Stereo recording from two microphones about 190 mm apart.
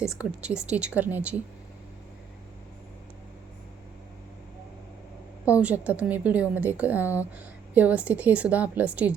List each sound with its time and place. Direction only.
0.1 s a woman's voice: 5° right (ahead or behind)
5.5 s a woman's voice: 10° right (ahead or behind)